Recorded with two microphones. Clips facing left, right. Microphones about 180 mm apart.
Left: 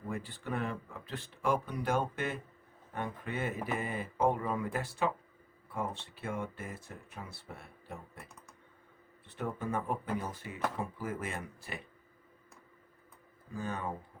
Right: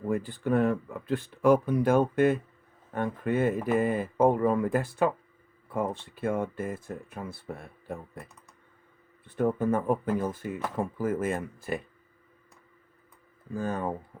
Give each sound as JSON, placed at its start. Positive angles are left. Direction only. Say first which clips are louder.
{"t": 0.1, "sound": "speech", "louder": "right 11 dB", "side_deg": -45}
{"t": 9.2, "sound": "speech", "louder": "right 11 dB", "side_deg": -50}
{"t": 13.6, "sound": "speech", "louder": "right 7 dB", "side_deg": -45}